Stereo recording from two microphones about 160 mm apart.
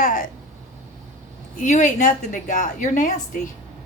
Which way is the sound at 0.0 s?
55° left (ahead or behind).